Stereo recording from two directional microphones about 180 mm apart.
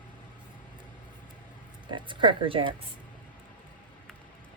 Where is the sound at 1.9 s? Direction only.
25° right (ahead or behind).